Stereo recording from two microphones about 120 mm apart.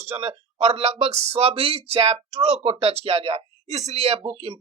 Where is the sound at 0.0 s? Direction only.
55° right (ahead or behind).